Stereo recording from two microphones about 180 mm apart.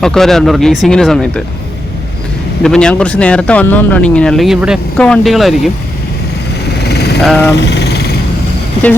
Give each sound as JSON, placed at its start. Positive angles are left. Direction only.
{"t": 0.0, "sound": "speech", "side_deg": 0}
{"t": 2.6, "sound": "speech", "side_deg": 5}
{"t": 6.8, "sound": "vehicle", "side_deg": 65}
{"t": 7.2, "sound": "speech", "side_deg": 0}
{"t": 7.5, "sound": "vehicle", "side_deg": 70}